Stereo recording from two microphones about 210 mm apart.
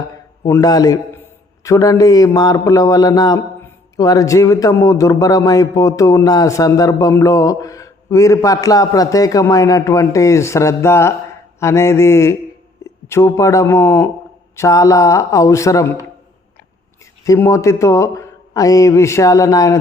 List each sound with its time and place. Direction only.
0.4 s a man's voice: 15° left (ahead or behind)
17.2 s a man's voice: 15° left (ahead or behind)